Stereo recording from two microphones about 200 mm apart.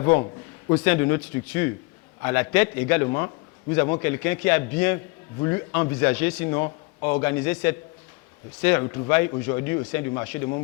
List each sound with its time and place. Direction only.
0.0 s a man's voice: 15° left (ahead or behind)
3.2 s a sound: 15° left (ahead or behind)
4.0 s a man's voice: 10° left (ahead or behind)